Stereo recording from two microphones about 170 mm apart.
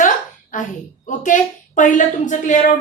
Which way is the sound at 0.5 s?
50° left (ahead or behind).